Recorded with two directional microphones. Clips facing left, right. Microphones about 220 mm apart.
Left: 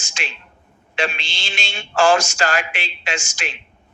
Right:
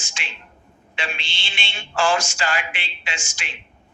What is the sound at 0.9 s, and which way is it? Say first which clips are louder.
A man's voice: left 7 dB; 45° left (ahead or behind).